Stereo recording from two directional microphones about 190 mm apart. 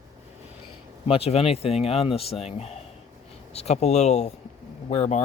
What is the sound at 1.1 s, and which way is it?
Speech, 30° left (ahead or behind).